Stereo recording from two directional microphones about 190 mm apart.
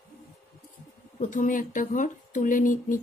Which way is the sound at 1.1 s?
40° left (ahead or behind).